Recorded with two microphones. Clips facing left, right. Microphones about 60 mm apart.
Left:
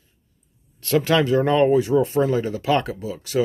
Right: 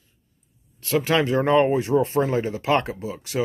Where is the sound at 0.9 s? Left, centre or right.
Centre.